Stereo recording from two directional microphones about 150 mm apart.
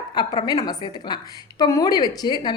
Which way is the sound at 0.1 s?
30° left (ahead or behind).